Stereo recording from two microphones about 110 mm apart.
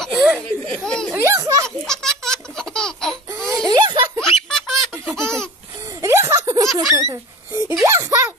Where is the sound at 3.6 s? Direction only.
40° right (ahead or behind).